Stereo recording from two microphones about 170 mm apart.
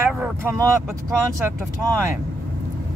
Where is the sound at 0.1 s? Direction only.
10° right (ahead or behind).